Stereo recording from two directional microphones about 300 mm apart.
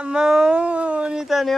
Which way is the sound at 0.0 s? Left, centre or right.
Centre.